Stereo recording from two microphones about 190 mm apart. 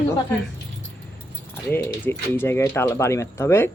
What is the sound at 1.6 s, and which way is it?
Speech, 10° left (ahead or behind).